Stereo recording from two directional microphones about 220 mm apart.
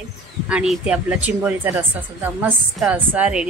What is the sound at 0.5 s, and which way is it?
A woman's voice, 5° right (ahead or behind).